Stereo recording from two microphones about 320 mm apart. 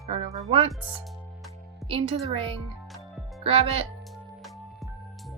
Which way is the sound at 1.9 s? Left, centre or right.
Centre.